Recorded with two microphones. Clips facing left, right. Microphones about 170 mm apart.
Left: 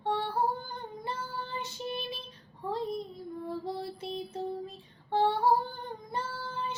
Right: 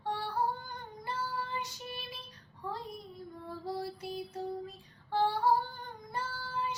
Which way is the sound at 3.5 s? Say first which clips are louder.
Even; 25° left (ahead or behind).